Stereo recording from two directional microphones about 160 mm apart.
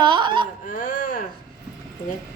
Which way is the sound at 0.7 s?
55° left (ahead or behind).